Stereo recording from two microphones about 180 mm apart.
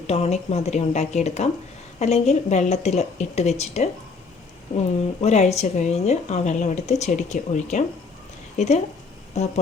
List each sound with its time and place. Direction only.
0.1 s a woman's voice: 35° left (ahead or behind)